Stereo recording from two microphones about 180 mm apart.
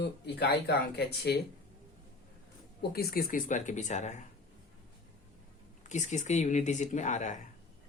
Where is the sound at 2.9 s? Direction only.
55° left (ahead or behind); by 4.2 s 40° left (ahead or behind).